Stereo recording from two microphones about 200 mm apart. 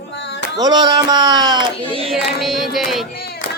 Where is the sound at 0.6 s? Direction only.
20° right (ahead or behind).